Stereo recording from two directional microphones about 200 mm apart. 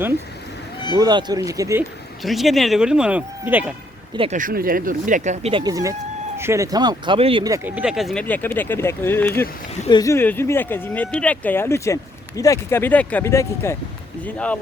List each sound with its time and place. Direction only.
0.9 s speech: 20° right (ahead or behind)
2.2 s speech: centre (ahead or behind)
4.1 s speech: 25° right (ahead or behind)
4.4 s speech: 45° right (ahead or behind); by 14.6 s 5° left (ahead or behind)